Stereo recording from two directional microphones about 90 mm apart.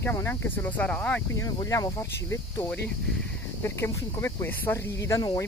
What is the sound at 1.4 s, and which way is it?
Speech, 40° left (ahead or behind).